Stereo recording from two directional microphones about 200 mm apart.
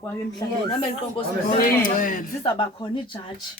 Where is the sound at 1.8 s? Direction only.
40° left (ahead or behind).